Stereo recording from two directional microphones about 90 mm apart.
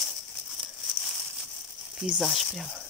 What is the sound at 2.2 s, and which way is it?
Speech, centre (ahead or behind).